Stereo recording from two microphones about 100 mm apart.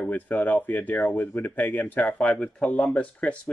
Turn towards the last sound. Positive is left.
turn(degrees=15)  # may be behind; listen again after turning